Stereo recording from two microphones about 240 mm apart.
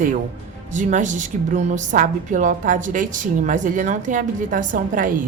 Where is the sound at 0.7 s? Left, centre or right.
Right.